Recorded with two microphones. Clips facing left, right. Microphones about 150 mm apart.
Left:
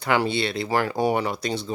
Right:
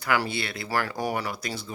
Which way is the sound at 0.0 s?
25° left (ahead or behind).